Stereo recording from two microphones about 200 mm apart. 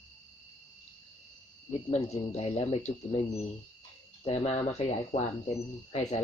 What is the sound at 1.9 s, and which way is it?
Speech, 30° left (ahead or behind).